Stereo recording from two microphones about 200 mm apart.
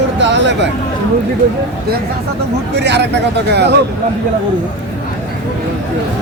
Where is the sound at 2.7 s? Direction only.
60° right (ahead or behind).